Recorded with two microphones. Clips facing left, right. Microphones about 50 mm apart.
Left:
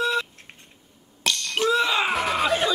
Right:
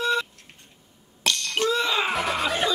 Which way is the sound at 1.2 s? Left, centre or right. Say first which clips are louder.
Left 1 dB; centre.